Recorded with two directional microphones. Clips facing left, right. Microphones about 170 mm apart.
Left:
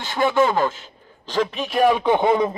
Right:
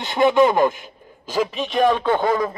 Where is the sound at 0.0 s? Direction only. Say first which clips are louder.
Right 3 dB; 20° right (ahead or behind).